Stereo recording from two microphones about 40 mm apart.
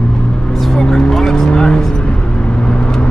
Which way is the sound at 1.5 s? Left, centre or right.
Left.